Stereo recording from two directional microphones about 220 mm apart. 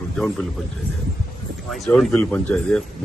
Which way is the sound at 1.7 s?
5° left (ahead or behind).